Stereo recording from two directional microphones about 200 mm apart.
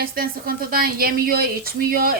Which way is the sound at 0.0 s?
50° right (ahead or behind).